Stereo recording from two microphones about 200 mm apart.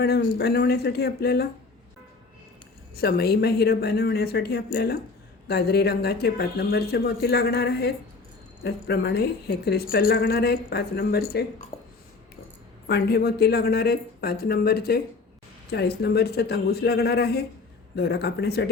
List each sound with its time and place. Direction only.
0.0 s speech: 55° left (ahead or behind)
2.9 s speech: 50° left (ahead or behind)
11.7 s a sound: 30° left (ahead or behind)
12.9 s speech: 55° left (ahead or behind)